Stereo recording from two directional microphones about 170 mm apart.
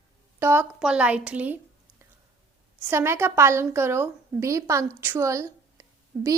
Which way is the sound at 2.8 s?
15° right (ahead or behind).